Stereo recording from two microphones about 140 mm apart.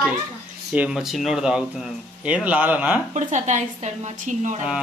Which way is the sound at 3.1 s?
60° right (ahead or behind).